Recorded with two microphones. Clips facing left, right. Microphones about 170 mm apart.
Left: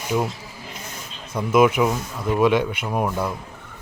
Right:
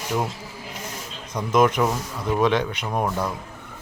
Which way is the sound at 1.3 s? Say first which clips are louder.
Left 2 dB; 5° left (ahead or behind).